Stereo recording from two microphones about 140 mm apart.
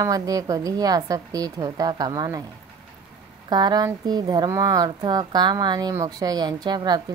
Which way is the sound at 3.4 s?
30° right (ahead or behind).